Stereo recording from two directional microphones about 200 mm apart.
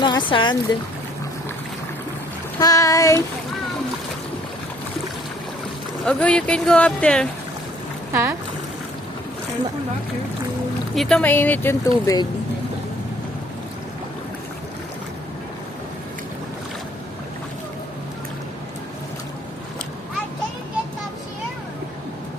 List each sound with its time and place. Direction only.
0.0 s speech: 25° left (ahead or behind)
2.6 s speech: 15° left (ahead or behind)
6.1 s speech: 5° left (ahead or behind)
8.1 s speech: 10° right (ahead or behind)
10.9 s speech: centre (ahead or behind); by 12.3 s 20° left (ahead or behind)